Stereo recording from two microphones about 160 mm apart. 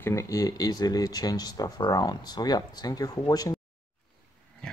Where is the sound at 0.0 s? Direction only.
20° left (ahead or behind).